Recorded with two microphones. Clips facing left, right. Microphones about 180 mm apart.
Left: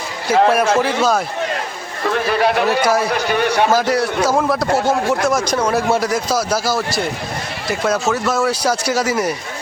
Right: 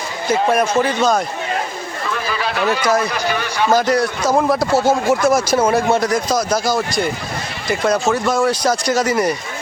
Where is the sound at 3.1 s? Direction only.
60° left (ahead or behind).